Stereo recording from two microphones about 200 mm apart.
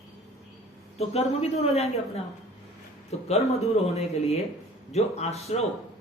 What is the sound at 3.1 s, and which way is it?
Speech, 30° left (ahead or behind).